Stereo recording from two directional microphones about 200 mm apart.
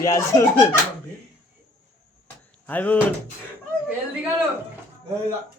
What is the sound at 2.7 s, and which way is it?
Speech, 10° left (ahead or behind).